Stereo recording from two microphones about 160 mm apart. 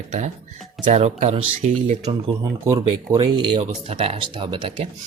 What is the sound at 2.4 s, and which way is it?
Speech, 20° right (ahead or behind).